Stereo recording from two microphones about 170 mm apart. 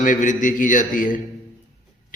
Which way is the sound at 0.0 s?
50° left (ahead or behind).